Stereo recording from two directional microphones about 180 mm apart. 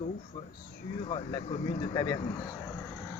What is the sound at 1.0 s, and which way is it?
Speech, 30° left (ahead or behind).